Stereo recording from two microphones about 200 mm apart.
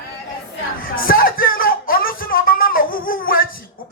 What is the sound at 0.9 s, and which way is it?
Music, 45° left (ahead or behind).